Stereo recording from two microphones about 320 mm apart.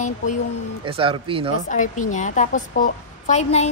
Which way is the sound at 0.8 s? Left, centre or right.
Centre.